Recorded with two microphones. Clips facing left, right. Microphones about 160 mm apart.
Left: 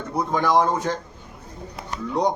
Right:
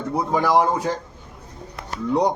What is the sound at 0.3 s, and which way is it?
Speech, 10° right (ahead or behind).